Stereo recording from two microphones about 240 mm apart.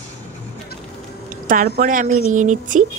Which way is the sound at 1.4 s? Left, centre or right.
Right.